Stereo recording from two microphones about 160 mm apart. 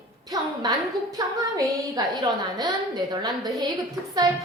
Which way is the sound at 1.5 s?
20° right (ahead or behind).